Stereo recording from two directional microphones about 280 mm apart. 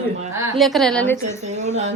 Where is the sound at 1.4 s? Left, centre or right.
Right.